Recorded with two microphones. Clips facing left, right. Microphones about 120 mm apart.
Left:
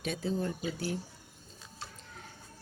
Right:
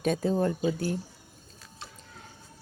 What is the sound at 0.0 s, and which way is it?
Speech, 45° right (ahead or behind).